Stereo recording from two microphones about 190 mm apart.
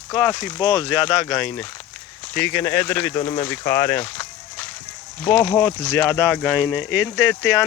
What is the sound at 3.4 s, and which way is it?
Speech, 10° left (ahead or behind).